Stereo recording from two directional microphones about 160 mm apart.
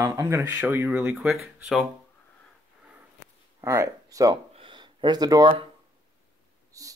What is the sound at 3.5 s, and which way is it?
Speech, 20° right (ahead or behind).